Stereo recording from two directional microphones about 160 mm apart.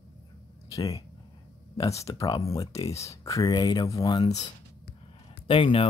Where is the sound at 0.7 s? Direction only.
20° left (ahead or behind).